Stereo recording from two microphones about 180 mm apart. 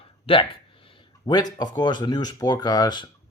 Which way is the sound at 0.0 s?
30° left (ahead or behind).